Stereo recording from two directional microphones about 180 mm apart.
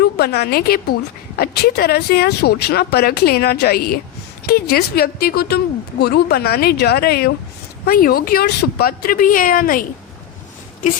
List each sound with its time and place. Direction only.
0.0 s a woman's voice: 60° left (ahead or behind)